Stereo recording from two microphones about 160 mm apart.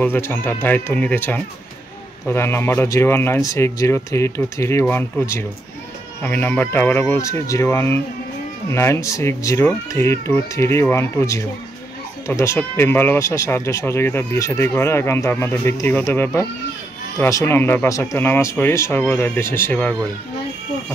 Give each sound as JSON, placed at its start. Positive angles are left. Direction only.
{"t": 0.0, "sound": "speech", "side_deg": 15}